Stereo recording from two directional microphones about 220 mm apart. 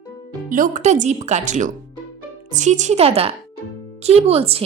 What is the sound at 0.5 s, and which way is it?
A woman's voice, 35° right (ahead or behind).